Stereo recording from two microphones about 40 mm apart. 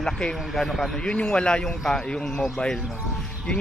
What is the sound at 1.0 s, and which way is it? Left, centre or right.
Speech, left.